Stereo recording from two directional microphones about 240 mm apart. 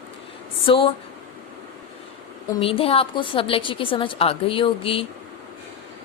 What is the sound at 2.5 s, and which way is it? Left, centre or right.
A woman's voice, left.